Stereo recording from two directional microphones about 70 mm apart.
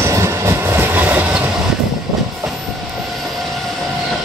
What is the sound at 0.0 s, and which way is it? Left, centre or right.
Train, right.